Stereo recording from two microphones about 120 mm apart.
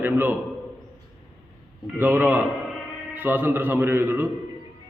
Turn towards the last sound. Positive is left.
turn(degrees=-15)  # may be behind; listen again after turning